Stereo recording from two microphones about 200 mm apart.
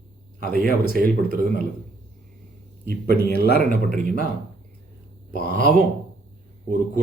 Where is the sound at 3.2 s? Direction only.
55° left (ahead or behind).